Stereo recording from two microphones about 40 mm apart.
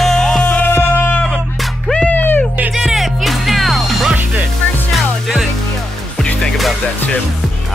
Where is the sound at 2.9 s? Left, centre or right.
Centre.